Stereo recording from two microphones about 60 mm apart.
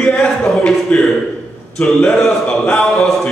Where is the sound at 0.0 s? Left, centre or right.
Centre.